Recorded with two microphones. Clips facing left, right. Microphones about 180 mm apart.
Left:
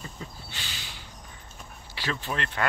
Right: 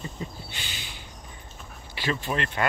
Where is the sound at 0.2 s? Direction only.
15° right (ahead or behind).